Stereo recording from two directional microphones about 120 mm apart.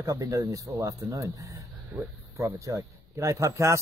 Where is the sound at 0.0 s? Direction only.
30° right (ahead or behind).